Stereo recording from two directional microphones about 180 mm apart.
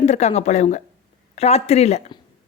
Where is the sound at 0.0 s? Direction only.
40° left (ahead or behind).